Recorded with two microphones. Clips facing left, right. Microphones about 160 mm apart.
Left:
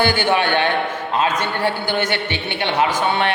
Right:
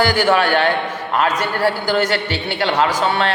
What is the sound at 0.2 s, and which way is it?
A man's voice, 20° left (ahead or behind).